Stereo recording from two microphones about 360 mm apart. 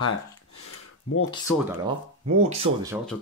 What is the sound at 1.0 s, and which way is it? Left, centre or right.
Speech, left.